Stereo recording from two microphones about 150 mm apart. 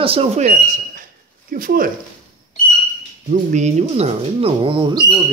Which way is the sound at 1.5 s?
70° right (ahead or behind).